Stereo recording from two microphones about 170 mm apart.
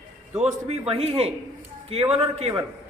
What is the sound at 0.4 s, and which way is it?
A man's voice, 40° right (ahead or behind).